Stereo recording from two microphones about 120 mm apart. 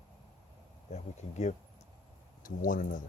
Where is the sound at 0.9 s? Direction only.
75° left (ahead or behind).